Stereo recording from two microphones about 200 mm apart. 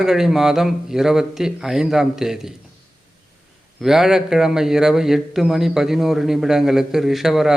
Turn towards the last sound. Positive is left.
turn(degrees=0)  # may be behind; listen again after turning